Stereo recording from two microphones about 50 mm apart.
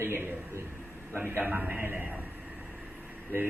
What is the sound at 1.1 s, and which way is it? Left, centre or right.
A man's voice, right.